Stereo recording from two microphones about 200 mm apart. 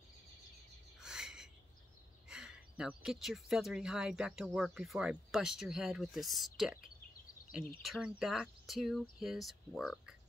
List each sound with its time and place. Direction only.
1.0 s bird: centre (ahead or behind)
2.2 s speech: 5° right (ahead or behind)